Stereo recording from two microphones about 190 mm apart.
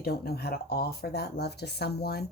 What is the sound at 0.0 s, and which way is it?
Speech, 55° left (ahead or behind).